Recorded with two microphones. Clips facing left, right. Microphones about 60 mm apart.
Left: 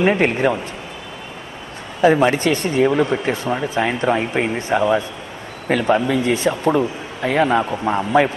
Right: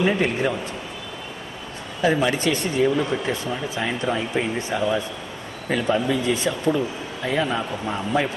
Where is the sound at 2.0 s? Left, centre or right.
Left.